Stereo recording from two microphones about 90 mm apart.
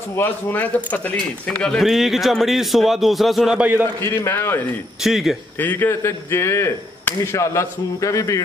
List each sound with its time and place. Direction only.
0.1 s a man's voice: 25° left (ahead or behind)
1.8 s a man's voice: centre (ahead or behind)
4.0 s speech: 25° left (ahead or behind)
5.0 s a man's voice: 5° right (ahead or behind)
5.6 s speech: 20° left (ahead or behind)